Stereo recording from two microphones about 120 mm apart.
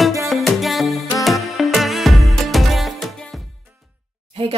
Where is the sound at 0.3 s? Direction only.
Centre (ahead or behind).